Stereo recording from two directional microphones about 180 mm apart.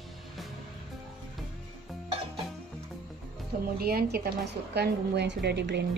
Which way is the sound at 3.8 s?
60° right (ahead or behind).